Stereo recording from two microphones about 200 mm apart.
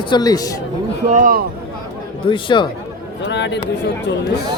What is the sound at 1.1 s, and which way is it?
Speech, 40° right (ahead or behind).